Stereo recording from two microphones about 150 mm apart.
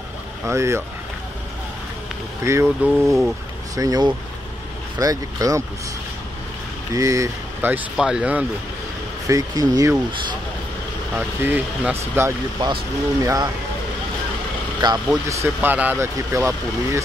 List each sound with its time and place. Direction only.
0.5 s speech: 20° right (ahead or behind)
2.4 s speech: 20° right (ahead or behind)
2.9 s speech: centre (ahead or behind)
3.7 s speech: 25° right (ahead or behind)
6.9 s speech: 20° right (ahead or behind)
9.3 s speech: 25° right (ahead or behind)
11.1 s speech: 10° right (ahead or behind)
14.8 s speech: 30° right (ahead or behind)
15.2 s speech: 15° right (ahead or behind)